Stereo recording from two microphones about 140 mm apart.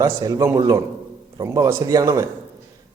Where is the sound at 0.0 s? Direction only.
25° right (ahead or behind).